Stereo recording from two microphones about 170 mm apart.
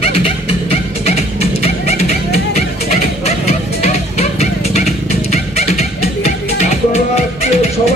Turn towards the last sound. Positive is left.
turn(degrees=40)  # may be behind; listen again after turning